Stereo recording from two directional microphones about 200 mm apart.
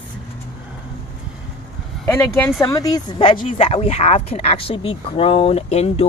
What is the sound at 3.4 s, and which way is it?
Speech, 40° left (ahead or behind).